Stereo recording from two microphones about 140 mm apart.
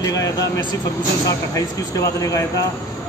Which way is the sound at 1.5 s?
25° left (ahead or behind).